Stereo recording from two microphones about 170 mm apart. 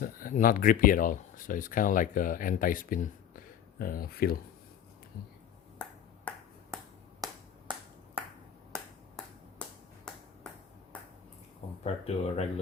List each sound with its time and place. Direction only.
0.0 s speech: 55° left (ahead or behind)
6.3 s finger snapping: 10° left (ahead or behind)
7.2 s finger snapping: 20° right (ahead or behind)
9.6 s finger snapping: 5° left (ahead or behind)
11.8 s speech: 40° left (ahead or behind)